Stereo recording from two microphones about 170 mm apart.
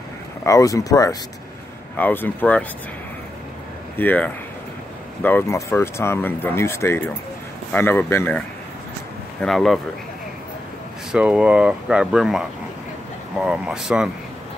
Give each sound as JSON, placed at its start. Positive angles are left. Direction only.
{"t": 0.4, "sound": "speech", "side_deg": 20}
{"t": 4.0, "sound": "speech", "side_deg": 10}
{"t": 9.4, "sound": "speech", "side_deg": 0}
{"t": 11.1, "sound": "speech", "side_deg": -5}